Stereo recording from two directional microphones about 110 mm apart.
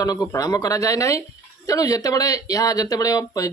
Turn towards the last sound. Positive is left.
turn(degrees=30)  # may be behind; listen again after turning